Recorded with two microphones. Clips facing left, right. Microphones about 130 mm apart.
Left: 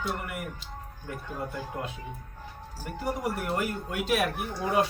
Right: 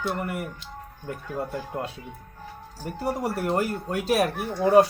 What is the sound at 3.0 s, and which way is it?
Speech, 35° right (ahead or behind).